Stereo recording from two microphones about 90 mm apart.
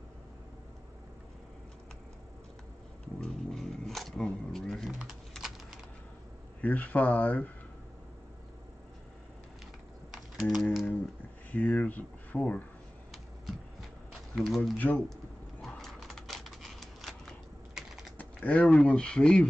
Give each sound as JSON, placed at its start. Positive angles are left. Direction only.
{"t": 3.2, "sound": "a sound", "side_deg": 5}
{"t": 5.3, "sound": "typing", "side_deg": -5}
{"t": 6.6, "sound": "speech", "side_deg": 20}
{"t": 10.1, "sound": "typing", "side_deg": 0}
{"t": 11.7, "sound": "speech", "side_deg": 20}
{"t": 13.1, "sound": "a sound", "side_deg": 0}
{"t": 14.5, "sound": "speech", "side_deg": 0}
{"t": 14.8, "sound": "speech", "side_deg": 15}
{"t": 15.6, "sound": "typewriter", "side_deg": 5}
{"t": 17.7, "sound": "typing", "side_deg": -5}
{"t": 18.1, "sound": "speech", "side_deg": 15}